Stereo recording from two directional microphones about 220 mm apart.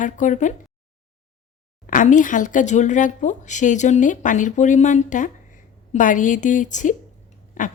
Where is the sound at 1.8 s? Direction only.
35° left (ahead or behind).